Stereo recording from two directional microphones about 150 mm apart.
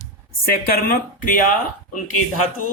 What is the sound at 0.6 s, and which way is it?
Speech, 75° left (ahead or behind).